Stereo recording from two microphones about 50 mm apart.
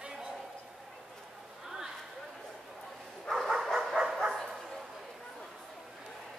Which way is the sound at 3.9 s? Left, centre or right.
Centre.